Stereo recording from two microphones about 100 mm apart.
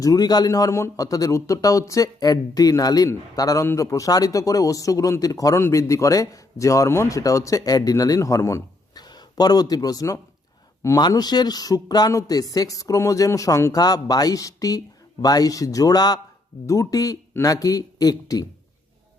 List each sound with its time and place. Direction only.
0.0 s speech: 40° left (ahead or behind)
9.0 s speech: 45° left (ahead or behind)
13.7 s speech: 40° left (ahead or behind)